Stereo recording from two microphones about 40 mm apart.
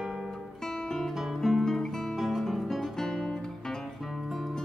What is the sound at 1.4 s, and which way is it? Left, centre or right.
Guitar, centre.